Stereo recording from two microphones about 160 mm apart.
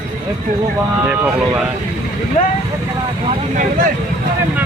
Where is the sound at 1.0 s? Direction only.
10° right (ahead or behind).